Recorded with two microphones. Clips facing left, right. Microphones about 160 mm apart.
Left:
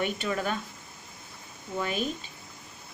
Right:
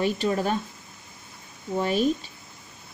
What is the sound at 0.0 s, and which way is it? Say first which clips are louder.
Speech: right 5 dB; 35° right (ahead or behind).